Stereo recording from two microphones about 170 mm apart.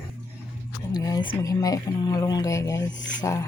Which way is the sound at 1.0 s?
25° left (ahead or behind).